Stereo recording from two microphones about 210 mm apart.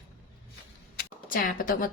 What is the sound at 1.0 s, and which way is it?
Speech, 40° left (ahead or behind).